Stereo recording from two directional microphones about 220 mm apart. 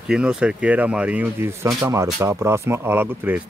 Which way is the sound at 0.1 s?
5° right (ahead or behind).